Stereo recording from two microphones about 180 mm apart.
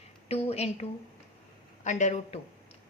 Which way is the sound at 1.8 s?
40° left (ahead or behind).